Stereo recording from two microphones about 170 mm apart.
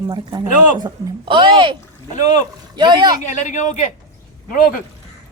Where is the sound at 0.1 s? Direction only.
25° right (ahead or behind).